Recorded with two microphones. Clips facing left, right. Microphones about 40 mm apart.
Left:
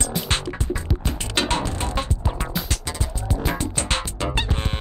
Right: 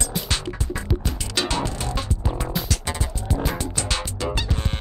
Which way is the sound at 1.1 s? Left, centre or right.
Left.